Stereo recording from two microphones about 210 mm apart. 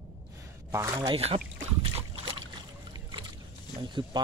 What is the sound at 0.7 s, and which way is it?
Speech, 15° right (ahead or behind).